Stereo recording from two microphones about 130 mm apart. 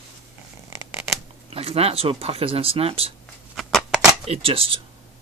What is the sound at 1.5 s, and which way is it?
Speech, 50° right (ahead or behind).